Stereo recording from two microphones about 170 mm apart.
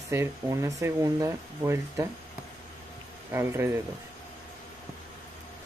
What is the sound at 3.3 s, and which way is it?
Speech, 15° right (ahead or behind).